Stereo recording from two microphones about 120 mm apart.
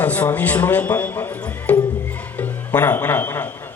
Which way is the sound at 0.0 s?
15° left (ahead or behind).